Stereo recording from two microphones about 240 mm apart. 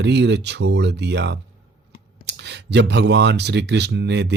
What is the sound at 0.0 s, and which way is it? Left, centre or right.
Speech, right.